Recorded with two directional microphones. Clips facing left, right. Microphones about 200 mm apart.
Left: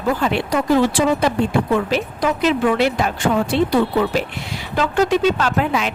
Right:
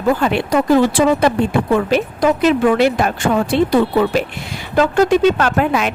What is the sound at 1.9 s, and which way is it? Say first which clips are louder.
Speech: right 5 dB; 50° right (ahead or behind).